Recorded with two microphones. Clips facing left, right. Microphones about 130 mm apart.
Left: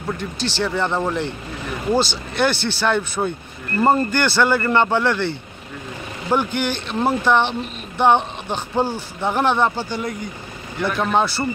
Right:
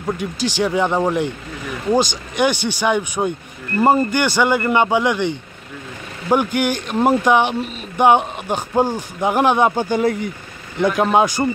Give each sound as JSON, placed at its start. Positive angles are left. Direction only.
{"t": 0.0, "sound": "speech", "side_deg": -10}
{"t": 10.8, "sound": "speech", "side_deg": -15}